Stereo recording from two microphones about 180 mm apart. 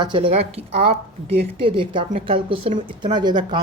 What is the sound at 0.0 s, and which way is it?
Speech, 25° right (ahead or behind).